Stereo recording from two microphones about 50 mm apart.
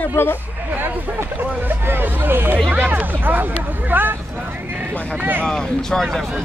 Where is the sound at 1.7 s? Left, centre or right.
Right.